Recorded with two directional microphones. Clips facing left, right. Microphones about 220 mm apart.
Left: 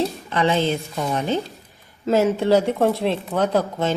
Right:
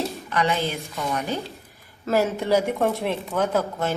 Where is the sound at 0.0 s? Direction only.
30° left (ahead or behind).